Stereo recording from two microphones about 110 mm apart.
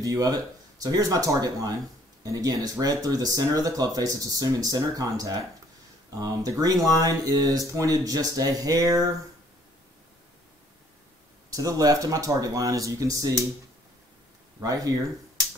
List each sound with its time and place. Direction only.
0.0 s speech: 30° right (ahead or behind)
11.5 s speech: 30° right (ahead or behind)
14.6 s speech: 35° right (ahead or behind)